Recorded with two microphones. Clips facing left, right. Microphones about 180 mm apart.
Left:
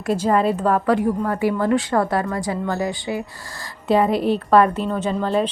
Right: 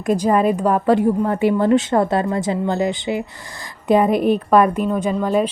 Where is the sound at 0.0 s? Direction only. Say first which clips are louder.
Right 2 dB; 15° right (ahead or behind).